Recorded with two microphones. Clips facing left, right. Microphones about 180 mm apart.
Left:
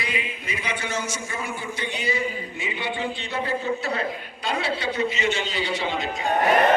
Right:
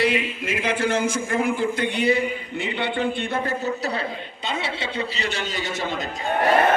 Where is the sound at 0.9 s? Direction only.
55° right (ahead or behind); by 4.0 s 40° right (ahead or behind).